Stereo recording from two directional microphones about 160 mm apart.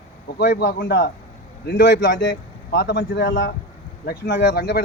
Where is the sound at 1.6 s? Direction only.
90° left.